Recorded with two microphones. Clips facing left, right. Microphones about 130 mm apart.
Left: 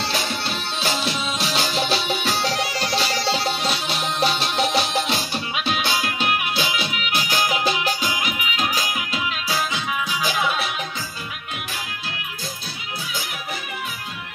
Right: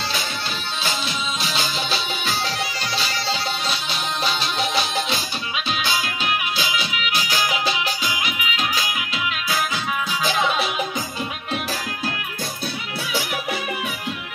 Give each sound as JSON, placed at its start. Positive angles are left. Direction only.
{"t": 1.0, "sound": "music", "side_deg": 70}
{"t": 10.2, "sound": "music", "side_deg": 5}